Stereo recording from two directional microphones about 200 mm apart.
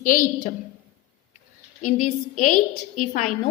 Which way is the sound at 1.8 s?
40° left (ahead or behind).